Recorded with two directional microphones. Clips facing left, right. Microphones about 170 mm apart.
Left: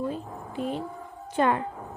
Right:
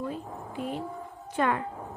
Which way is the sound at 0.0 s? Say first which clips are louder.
Left 3 dB; 30° left (ahead or behind).